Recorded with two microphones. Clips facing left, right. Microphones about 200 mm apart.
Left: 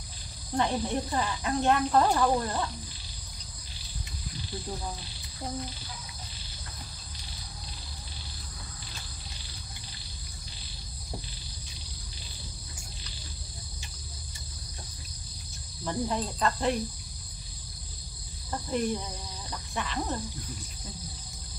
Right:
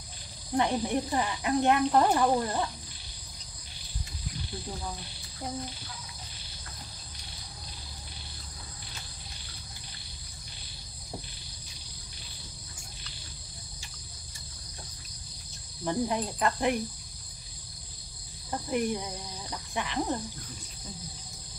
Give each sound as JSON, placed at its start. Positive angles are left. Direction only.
{"t": 0.6, "sound": "speech", "side_deg": -15}
{"t": 15.8, "sound": "speech", "side_deg": -15}
{"t": 18.5, "sound": "speech", "side_deg": -15}
{"t": 19.5, "sound": "cricket", "side_deg": -15}